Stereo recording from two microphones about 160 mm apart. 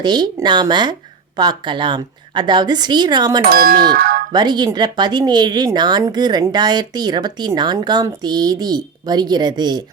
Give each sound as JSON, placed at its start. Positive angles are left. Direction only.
{"t": 0.0, "sound": "speech", "side_deg": -25}
{"t": 3.5, "sound": "a sound", "side_deg": -70}
{"t": 4.3, "sound": "speech", "side_deg": -25}